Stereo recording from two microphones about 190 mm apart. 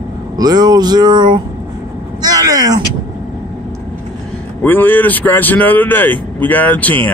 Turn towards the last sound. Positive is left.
turn(degrees=10)  # may be behind; listen again after turning